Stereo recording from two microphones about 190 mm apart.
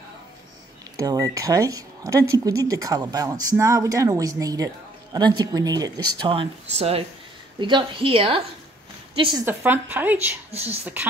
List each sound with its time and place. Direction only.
0.9 s speech: 20° right (ahead or behind)
9.4 s speech: 10° right (ahead or behind)
10.5 s speech: 35° right (ahead or behind)
10.8 s speech: 10° right (ahead or behind)